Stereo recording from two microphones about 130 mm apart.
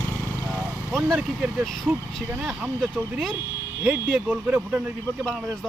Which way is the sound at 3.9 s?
20° right (ahead or behind).